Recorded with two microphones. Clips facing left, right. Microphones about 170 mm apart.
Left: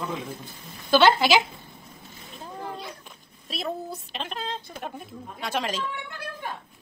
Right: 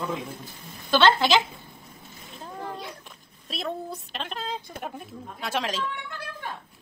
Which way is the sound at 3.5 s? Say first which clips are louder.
Even; centre (ahead or behind).